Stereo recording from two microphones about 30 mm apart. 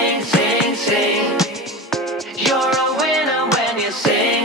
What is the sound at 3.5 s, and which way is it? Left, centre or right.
Music, right.